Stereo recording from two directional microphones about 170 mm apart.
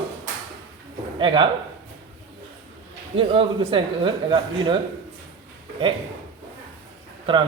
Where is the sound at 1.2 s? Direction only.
30° right (ahead or behind).